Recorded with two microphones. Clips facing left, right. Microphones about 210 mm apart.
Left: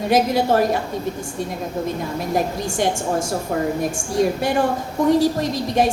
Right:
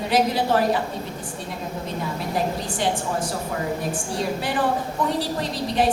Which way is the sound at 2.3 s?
45° left (ahead or behind).